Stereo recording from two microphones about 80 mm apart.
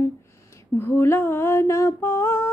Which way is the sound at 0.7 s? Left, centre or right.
Left.